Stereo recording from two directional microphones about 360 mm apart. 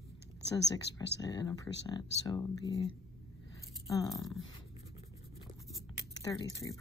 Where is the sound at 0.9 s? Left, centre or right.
Left.